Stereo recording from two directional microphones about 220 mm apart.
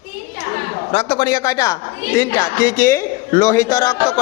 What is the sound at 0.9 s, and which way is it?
A man's voice, 25° left (ahead or behind).